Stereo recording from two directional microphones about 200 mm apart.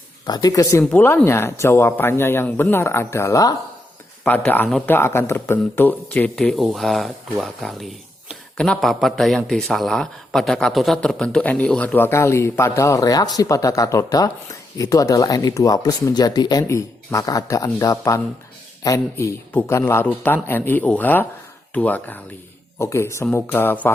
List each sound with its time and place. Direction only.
0.3 s speech: 20° left (ahead or behind)